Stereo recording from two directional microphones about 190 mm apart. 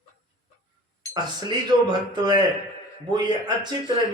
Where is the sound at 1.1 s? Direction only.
20° right (ahead or behind).